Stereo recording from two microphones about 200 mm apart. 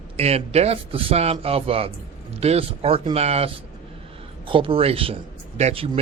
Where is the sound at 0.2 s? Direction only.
30° right (ahead or behind).